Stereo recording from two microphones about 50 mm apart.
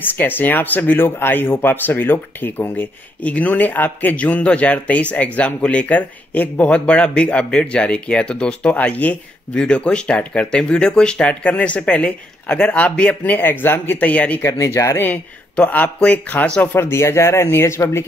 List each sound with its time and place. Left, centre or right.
0.1 s speech: left
1.0 s speech: left
3.2 s speech: left
8.7 s speech: left
14.4 s speech: left
15.5 s speech: left
16.7 s speech: left